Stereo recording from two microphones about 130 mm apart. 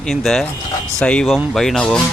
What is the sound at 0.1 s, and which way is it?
Speech, centre (ahead or behind).